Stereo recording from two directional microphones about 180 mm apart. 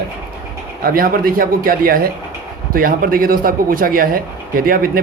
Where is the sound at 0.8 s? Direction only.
55° right (ahead or behind).